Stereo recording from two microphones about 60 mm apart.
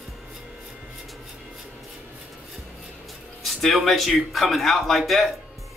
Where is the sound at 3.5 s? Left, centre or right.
Centre.